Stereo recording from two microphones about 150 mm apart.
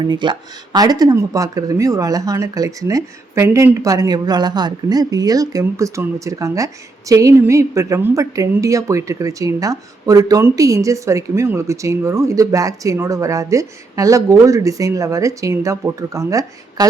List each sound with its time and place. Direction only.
0.0 s a woman's voice: 30° right (ahead or behind)